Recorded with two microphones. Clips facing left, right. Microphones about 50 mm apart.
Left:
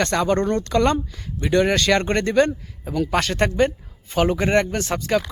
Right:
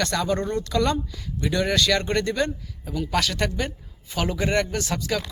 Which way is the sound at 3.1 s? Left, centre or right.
Left.